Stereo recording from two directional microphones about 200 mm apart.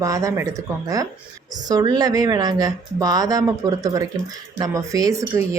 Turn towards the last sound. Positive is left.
turn(degrees=-15)  # may be behind; listen again after turning